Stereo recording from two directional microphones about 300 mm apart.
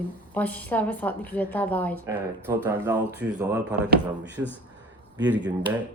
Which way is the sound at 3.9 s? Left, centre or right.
Right.